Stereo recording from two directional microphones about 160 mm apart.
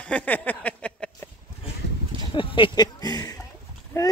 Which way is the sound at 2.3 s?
30° left (ahead or behind).